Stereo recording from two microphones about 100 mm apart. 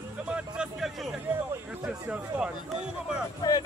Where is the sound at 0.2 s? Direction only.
10° right (ahead or behind).